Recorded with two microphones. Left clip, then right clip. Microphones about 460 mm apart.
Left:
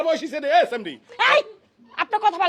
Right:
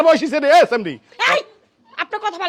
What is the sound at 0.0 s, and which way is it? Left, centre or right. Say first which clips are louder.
Speech: right 9 dB; right.